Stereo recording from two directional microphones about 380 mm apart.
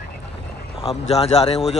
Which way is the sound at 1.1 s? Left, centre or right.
Centre.